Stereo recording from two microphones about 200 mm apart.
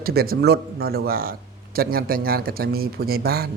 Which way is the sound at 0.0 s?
50° right (ahead or behind).